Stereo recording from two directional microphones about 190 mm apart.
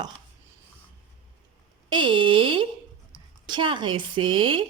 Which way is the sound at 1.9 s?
25° right (ahead or behind).